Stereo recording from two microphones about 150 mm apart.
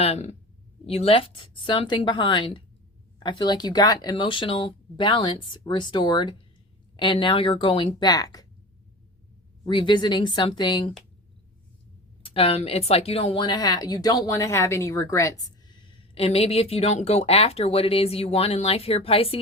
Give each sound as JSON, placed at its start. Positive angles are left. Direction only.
{"t": 0.0, "sound": "speech", "side_deg": 45}
{"t": 9.6, "sound": "speech", "side_deg": 30}
{"t": 12.2, "sound": "a woman's voice", "side_deg": 40}
{"t": 16.1, "sound": "speech", "side_deg": 40}